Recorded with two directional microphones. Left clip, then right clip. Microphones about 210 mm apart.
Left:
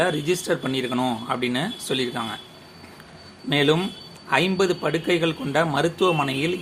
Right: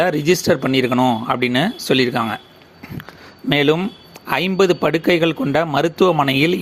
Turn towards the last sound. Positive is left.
turn(degrees=-40)  # may be behind; listen again after turning